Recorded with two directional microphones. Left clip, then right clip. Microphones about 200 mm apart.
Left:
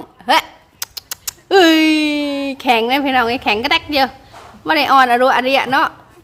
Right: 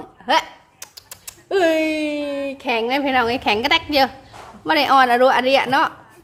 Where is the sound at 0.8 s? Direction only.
40° left (ahead or behind); by 4.1 s 10° left (ahead or behind).